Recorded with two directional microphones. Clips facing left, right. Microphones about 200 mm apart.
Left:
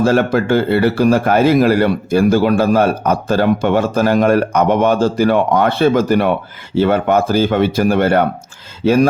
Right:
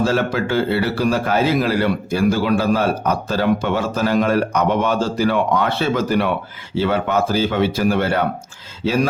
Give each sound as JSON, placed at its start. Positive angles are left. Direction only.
{"t": 0.0, "sound": "a man's voice", "side_deg": 50}